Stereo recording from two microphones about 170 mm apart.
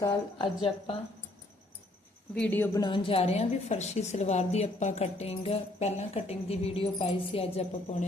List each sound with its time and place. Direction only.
0.0 s a woman's voice: 30° left (ahead or behind)
2.3 s a woman's voice: 10° left (ahead or behind)
2.7 s a woman's voice: 30° left (ahead or behind)